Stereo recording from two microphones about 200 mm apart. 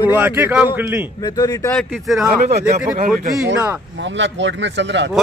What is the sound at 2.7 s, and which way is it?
Speech, 40° right (ahead or behind).